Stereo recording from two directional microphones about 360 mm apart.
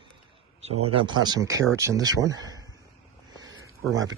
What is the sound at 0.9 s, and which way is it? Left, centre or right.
Speech, centre.